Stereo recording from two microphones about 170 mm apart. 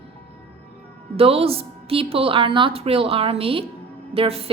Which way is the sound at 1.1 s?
35° right (ahead or behind).